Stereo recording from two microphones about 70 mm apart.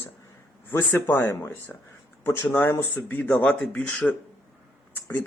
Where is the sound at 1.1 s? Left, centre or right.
Left.